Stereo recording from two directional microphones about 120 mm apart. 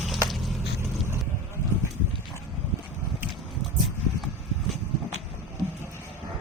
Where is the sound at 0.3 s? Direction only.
Centre (ahead or behind).